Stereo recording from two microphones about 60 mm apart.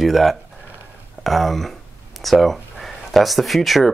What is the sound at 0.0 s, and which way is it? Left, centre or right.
Speech, centre.